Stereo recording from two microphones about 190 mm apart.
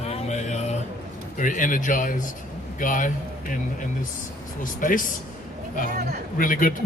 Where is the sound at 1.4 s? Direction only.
45° left (ahead or behind).